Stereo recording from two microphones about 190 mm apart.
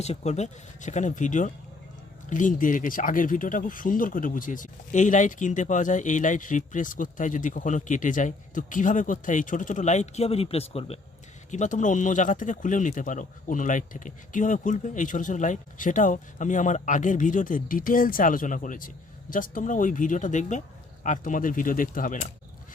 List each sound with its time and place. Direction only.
0.0 s speech: 35° left (ahead or behind)